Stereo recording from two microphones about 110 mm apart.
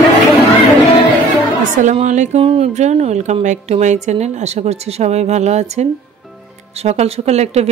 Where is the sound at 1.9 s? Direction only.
90° right.